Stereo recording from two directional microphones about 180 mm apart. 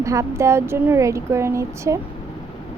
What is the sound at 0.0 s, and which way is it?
Speech, 15° right (ahead or behind).